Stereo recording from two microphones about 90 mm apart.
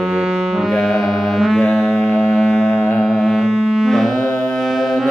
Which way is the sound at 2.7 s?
25° left (ahead or behind).